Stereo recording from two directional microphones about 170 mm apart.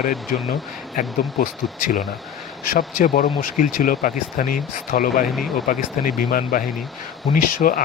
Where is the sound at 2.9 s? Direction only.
55° left (ahead or behind).